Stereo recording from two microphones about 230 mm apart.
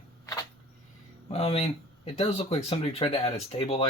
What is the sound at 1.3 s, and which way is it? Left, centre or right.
Speech, left.